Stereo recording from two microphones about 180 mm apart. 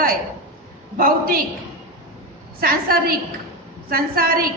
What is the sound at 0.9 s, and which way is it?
Speech, 55° right (ahead or behind).